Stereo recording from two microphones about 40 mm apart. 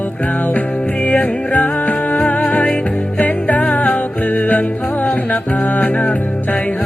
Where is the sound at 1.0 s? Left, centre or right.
Left.